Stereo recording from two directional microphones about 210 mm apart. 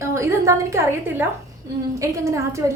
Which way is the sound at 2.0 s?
15° right (ahead or behind).